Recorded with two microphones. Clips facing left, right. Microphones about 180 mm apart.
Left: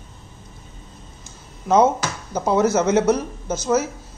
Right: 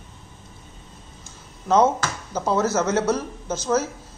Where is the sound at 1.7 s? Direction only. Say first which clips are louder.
Left 2 dB; 10° left (ahead or behind).